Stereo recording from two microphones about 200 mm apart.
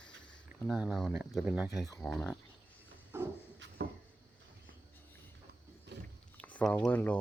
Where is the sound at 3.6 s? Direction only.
60° right (ahead or behind).